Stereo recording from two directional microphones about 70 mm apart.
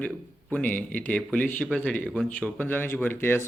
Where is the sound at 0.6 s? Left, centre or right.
Left.